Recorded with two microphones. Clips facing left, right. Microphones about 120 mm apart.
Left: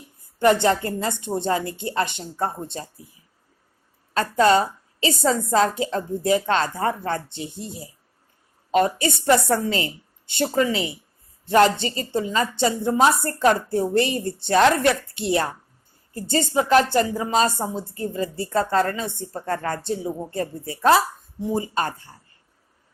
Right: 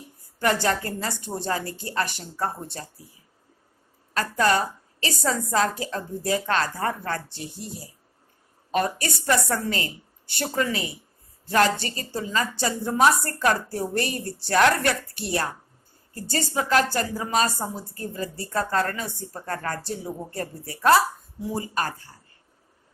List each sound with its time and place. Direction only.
0.3 s a woman's voice: 25° left (ahead or behind)
4.1 s a woman's voice: 25° left (ahead or behind)